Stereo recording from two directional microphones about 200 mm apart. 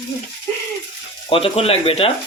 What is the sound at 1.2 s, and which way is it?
Speech, 30° left (ahead or behind).